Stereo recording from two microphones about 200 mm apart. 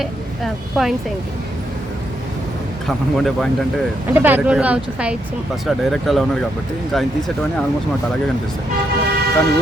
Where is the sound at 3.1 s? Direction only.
Centre (ahead or behind).